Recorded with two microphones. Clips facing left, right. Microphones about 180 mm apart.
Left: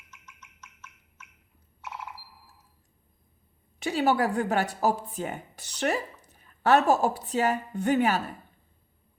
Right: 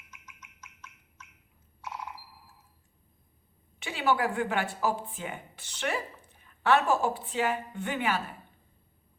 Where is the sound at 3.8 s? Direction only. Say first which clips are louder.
Left 4 dB; 40° left (ahead or behind).